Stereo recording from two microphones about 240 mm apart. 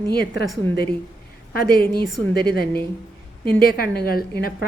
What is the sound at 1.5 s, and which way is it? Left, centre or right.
A woman's voice, left.